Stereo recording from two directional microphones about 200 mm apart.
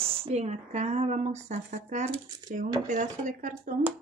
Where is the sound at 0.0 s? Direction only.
30° right (ahead or behind).